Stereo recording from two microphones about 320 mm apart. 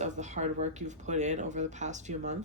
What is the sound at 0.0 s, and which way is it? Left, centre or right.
Speech, right.